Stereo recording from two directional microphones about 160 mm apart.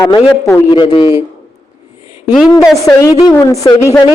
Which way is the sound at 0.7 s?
30° left (ahead or behind).